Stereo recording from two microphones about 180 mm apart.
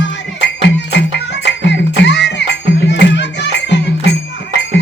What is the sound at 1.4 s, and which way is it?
Music, 75° left (ahead or behind).